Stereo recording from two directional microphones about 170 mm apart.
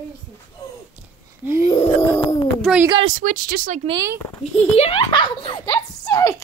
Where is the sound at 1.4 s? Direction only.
15° right (ahead or behind).